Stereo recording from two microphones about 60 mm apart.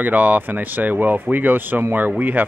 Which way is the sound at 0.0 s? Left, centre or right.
Right.